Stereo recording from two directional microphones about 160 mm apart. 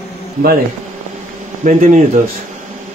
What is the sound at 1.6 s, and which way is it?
Speech, 55° right (ahead or behind).